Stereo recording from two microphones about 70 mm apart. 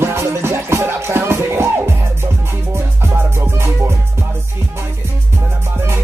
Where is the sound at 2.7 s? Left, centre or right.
Right.